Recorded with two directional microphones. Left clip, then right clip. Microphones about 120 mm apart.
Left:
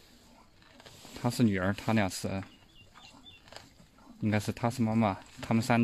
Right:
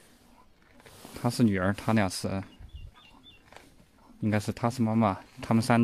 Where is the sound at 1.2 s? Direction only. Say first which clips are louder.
Right 3 dB; 30° right (ahead or behind).